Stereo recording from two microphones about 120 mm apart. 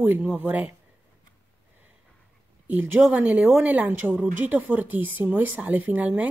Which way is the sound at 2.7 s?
15° right (ahead or behind).